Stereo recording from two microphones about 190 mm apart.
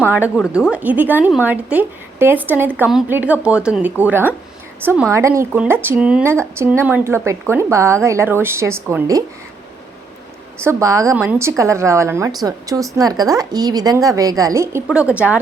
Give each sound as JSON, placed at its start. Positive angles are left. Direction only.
{"t": 0.0, "sound": "speech", "side_deg": -10}
{"t": 10.6, "sound": "speech", "side_deg": -15}